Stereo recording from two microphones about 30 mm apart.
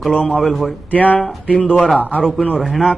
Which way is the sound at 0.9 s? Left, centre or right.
Left.